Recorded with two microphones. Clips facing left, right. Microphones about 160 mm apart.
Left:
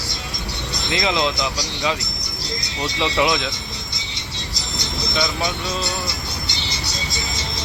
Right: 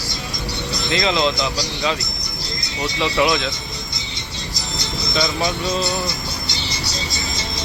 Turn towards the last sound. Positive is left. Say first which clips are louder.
# right 4 dB
turn(degrees=0)  # may be behind; listen again after turning